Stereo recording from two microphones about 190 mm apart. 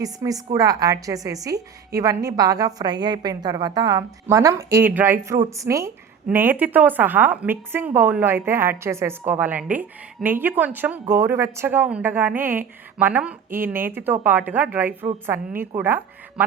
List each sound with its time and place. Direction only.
0.0 s a woman's voice: 20° right (ahead or behind)